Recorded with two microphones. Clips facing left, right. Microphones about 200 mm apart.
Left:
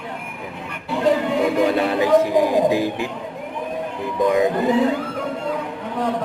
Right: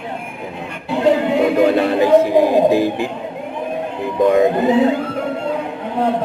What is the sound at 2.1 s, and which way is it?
Speech, 25° right (ahead or behind).